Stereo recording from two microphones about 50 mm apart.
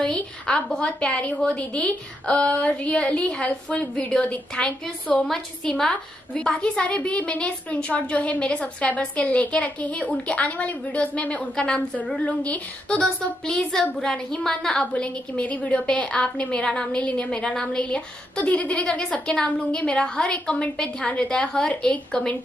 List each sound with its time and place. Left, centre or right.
0.0 s a woman's voice: left
12.3 s a woman's voice: left
13.5 s a woman's voice: centre